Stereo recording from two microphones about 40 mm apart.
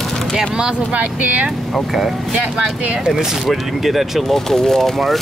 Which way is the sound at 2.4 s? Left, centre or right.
Right.